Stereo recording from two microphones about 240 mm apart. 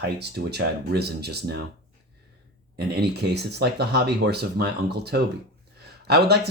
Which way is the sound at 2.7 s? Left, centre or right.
Right.